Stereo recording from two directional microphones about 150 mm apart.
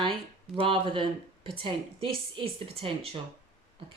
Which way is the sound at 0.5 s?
35° right (ahead or behind).